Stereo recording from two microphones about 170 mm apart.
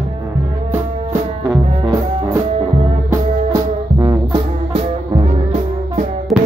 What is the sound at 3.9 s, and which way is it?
Music, 30° right (ahead or behind).